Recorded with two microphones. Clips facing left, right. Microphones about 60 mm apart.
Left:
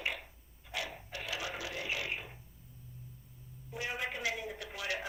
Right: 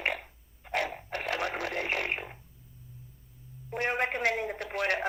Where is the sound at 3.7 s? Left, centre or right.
Right.